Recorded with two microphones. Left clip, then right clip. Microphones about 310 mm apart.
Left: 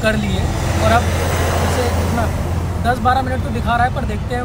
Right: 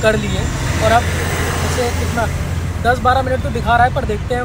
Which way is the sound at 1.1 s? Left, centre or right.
Left.